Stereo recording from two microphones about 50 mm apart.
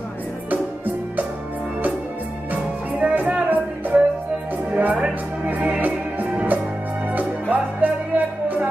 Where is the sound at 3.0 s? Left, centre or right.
Right.